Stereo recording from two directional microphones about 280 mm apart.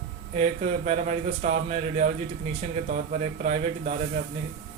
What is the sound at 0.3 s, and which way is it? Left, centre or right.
Speech, right.